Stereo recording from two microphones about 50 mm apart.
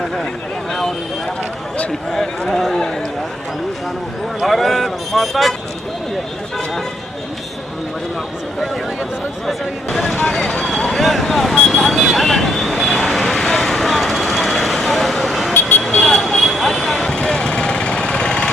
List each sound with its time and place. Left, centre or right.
0.7 s a sound: centre
2.1 s speech: centre
4.4 s speech: centre
10.2 s speech: centre
11.5 s vehicle: centre
11.9 s vehicle: centre
12.1 s vehicle: centre